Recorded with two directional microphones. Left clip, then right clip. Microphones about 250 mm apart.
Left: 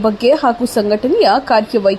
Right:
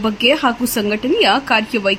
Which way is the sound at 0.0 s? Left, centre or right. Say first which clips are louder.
Left 3 dB; centre.